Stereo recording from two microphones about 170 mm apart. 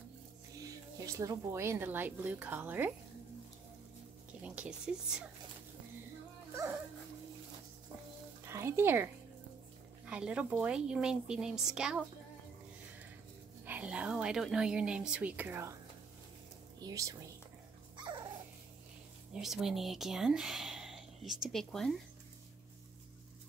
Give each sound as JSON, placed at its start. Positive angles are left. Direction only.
{"t": 0.6, "sound": "speech", "side_deg": -20}
{"t": 4.4, "sound": "speech", "side_deg": -5}
{"t": 8.5, "sound": "speech", "side_deg": -15}
{"t": 13.7, "sound": "speech", "side_deg": -10}
{"t": 16.8, "sound": "speech", "side_deg": -20}
{"t": 17.9, "sound": "dog", "side_deg": -25}
{"t": 19.4, "sound": "speech", "side_deg": 0}